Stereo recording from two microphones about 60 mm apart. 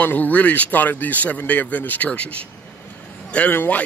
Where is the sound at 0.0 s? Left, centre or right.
Left.